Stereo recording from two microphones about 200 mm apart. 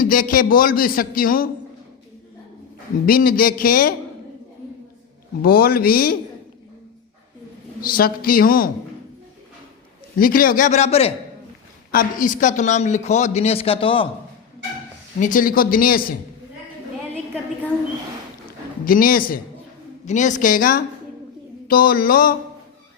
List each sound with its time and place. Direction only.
0.0 s a man's voice: 45° left (ahead or behind)
3.1 s a man's voice: 45° left (ahead or behind)
5.4 s a man's voice: 50° left (ahead or behind)
7.8 s a man's voice: 45° left (ahead or behind)
10.2 s a man's voice: 45° left (ahead or behind)
11.9 s a man's voice: 45° left (ahead or behind); by 14.1 s 25° left (ahead or behind)
15.2 s a man's voice: 40° left (ahead or behind)
18.9 s a man's voice: 45° left (ahead or behind)